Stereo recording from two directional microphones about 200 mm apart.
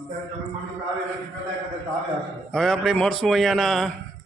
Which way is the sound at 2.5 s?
Centre (ahead or behind).